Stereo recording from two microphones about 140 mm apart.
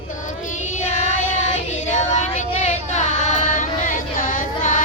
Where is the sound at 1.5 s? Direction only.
60° left (ahead or behind).